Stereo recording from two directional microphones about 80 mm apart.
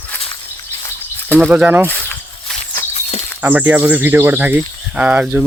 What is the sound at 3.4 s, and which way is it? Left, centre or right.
Speech, right.